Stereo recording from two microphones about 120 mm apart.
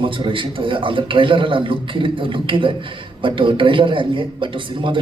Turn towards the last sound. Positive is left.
turn(degrees=-45)  # may be behind; listen again after turning